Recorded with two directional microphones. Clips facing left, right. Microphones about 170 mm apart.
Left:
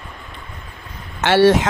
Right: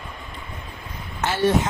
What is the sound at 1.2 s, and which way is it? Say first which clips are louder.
Speech: left 7 dB; 90° left.